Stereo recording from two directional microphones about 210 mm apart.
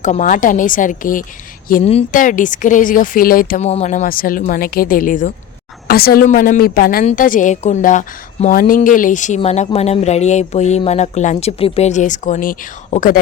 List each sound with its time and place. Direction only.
0.0 s a woman's voice: 35° left (ahead or behind)